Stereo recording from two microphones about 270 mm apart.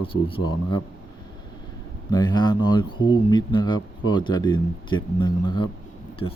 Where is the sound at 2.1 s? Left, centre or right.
Centre.